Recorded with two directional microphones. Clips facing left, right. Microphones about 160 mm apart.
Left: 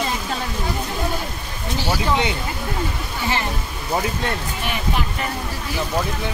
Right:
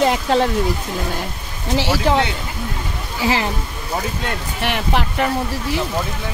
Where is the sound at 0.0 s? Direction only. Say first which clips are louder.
Right 9 dB; 75° right (ahead or behind).